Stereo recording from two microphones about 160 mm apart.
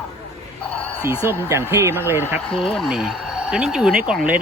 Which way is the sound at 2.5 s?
Centre (ahead or behind).